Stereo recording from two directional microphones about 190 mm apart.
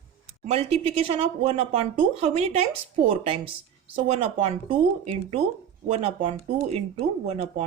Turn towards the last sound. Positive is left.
turn(degrees=-35)  # may be behind; listen again after turning